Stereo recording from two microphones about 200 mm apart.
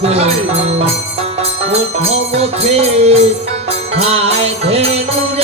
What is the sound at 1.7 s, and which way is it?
Music, 30° right (ahead or behind).